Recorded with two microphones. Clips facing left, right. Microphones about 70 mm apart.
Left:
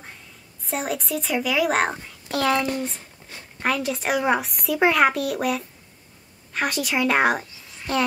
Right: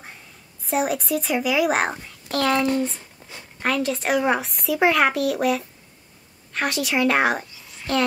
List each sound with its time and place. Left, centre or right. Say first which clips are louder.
0.7 s a woman's voice: right 4 dB; centre